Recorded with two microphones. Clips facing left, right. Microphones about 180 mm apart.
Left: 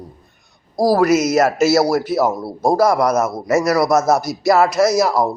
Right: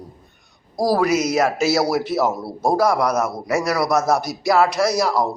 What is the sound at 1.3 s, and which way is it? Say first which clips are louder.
A man's voice: left 4 dB; 5° left (ahead or behind).